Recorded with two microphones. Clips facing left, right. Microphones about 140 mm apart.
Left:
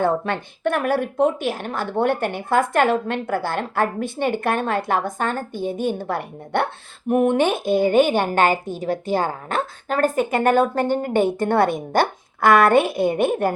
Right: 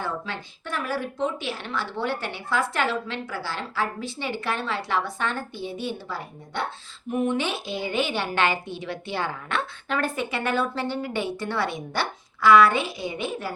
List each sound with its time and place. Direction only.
0.0 s a woman's voice: 55° left (ahead or behind)